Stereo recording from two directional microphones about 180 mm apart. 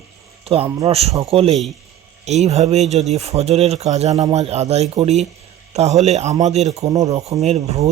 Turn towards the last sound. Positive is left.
turn(degrees=-35)  # may be behind; listen again after turning